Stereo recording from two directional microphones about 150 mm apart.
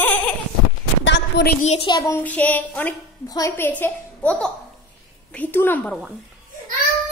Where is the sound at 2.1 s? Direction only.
10° left (ahead or behind).